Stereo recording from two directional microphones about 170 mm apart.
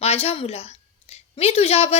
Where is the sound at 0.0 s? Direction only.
35° left (ahead or behind).